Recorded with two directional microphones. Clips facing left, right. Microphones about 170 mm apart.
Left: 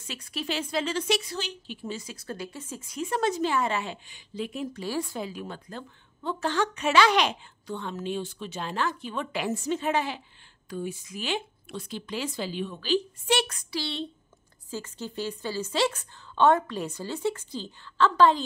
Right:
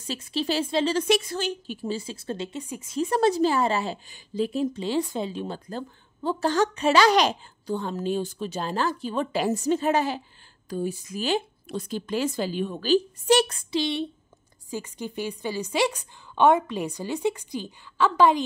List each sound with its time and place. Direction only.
0.2 s speech: 30° right (ahead or behind)
0.9 s a woman's voice: 50° right (ahead or behind); by 2.6 s 25° right (ahead or behind)
2.6 s a woman's voice: 15° right (ahead or behind)
2.9 s a woman's voice: 35° right (ahead or behind); by 18.4 s 15° right (ahead or behind)